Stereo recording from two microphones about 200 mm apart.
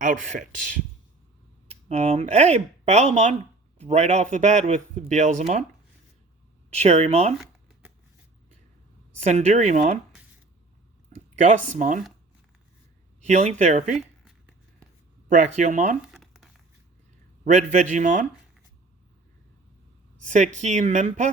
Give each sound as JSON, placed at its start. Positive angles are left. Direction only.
{"t": 0.0, "sound": "speech", "side_deg": -40}
{"t": 1.9, "sound": "speech", "side_deg": -30}
{"t": 6.7, "sound": "speech", "side_deg": -30}
{"t": 7.3, "sound": "shuffling cards", "side_deg": -5}
{"t": 9.2, "sound": "speech", "side_deg": -35}
{"t": 11.3, "sound": "speech", "side_deg": -40}
{"t": 13.2, "sound": "speech", "side_deg": -30}
{"t": 15.3, "sound": "speech", "side_deg": -40}
{"t": 16.1, "sound": "crumpling", "side_deg": 0}
{"t": 17.4, "sound": "speech", "side_deg": -35}
{"t": 20.2, "sound": "speech", "side_deg": -35}